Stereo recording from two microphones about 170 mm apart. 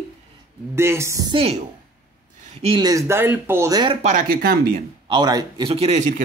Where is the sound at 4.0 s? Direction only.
50° right (ahead or behind).